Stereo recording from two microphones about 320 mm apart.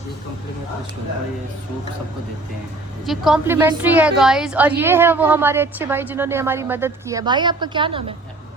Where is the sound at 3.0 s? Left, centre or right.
Centre.